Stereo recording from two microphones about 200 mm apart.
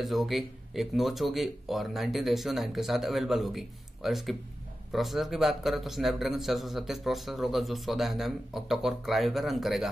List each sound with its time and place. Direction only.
0.0 s a man's voice: centre (ahead or behind)